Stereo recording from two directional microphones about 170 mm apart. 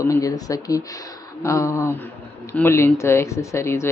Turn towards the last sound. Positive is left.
turn(degrees=15)  # may be behind; listen again after turning